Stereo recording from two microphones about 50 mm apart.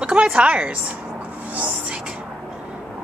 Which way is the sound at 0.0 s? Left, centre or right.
Right.